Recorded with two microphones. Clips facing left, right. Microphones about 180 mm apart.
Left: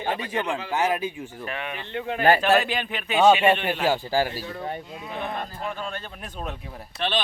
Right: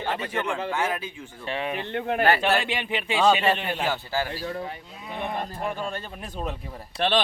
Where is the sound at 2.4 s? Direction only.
25° right (ahead or behind).